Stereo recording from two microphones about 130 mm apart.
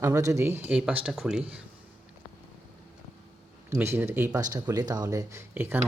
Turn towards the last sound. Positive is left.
turn(degrees=-15)  # may be behind; listen again after turning